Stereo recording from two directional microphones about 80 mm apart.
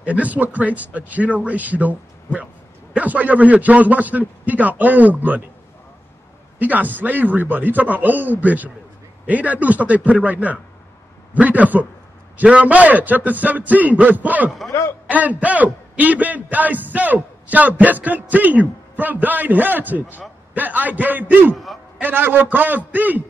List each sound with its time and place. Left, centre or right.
0.0 s a man's voice: centre
6.6 s a man's voice: right
14.7 s a man's voice: left
15.0 s a man's voice: centre
21.5 s a sound: centre
22.0 s a man's voice: right